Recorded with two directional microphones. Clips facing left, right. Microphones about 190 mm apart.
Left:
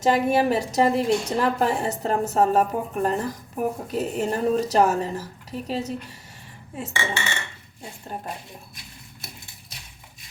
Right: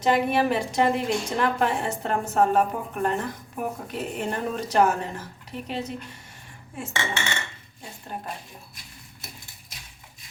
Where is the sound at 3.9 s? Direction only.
40° left (ahead or behind).